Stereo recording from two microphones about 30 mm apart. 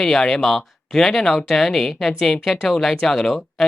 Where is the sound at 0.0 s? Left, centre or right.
Centre.